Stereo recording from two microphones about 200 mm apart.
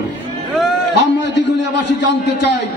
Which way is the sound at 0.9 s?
60° left (ahead or behind).